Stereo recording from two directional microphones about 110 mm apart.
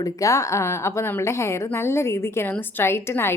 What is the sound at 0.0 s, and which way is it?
A woman's voice, 30° left (ahead or behind).